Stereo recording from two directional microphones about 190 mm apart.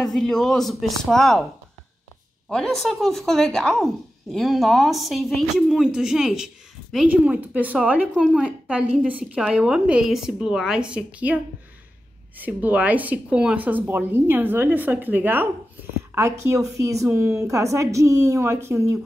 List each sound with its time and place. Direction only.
0.0 s speech: centre (ahead or behind)
2.5 s a woman's voice: centre (ahead or behind); by 18.9 s 15° right (ahead or behind)